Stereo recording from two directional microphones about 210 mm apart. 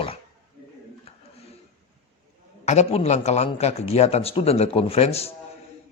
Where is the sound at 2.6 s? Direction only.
30° left (ahead or behind).